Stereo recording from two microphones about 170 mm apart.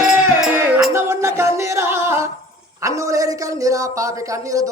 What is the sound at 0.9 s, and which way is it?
Music, 15° right (ahead or behind).